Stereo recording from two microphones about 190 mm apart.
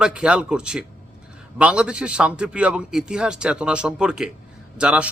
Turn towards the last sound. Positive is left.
turn(degrees=-5)  # may be behind; listen again after turning